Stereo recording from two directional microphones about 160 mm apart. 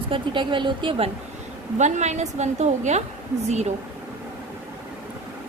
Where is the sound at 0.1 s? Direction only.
30° right (ahead or behind).